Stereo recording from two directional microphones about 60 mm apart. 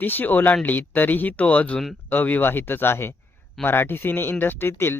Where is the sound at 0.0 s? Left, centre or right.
Left.